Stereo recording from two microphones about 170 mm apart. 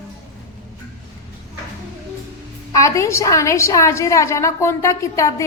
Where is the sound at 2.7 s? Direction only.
20° left (ahead or behind).